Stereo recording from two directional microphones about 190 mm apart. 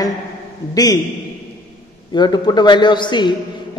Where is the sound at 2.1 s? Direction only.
25° left (ahead or behind).